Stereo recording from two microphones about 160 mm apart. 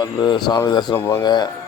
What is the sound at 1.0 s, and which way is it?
Speech, 15° left (ahead or behind).